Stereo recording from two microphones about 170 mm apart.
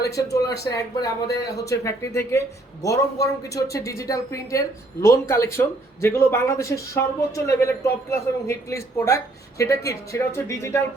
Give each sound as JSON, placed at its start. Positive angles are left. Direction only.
{"t": 0.1, "sound": "speech", "side_deg": 20}